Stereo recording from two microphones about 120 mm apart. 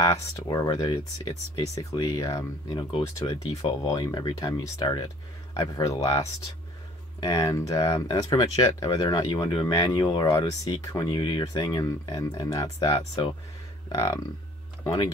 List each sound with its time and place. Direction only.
0.0 s speech: 30° left (ahead or behind)
13.9 s speech: 35° left (ahead or behind)